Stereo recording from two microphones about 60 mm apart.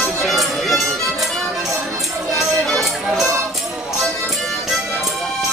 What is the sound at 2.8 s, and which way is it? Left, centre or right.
Music, centre.